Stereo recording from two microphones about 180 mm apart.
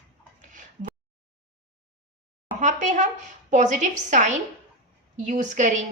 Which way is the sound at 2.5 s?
45° right (ahead or behind).